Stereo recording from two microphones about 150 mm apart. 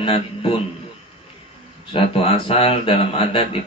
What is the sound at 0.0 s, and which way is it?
Speech, 35° left (ahead or behind).